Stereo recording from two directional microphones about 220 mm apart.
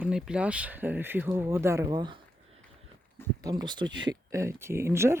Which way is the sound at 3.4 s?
20° right (ahead or behind).